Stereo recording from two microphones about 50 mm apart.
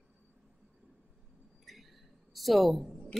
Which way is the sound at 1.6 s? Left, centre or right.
Centre.